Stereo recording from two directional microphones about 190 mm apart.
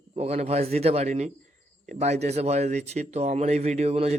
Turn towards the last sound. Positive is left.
turn(degrees=-35)  # may be behind; listen again after turning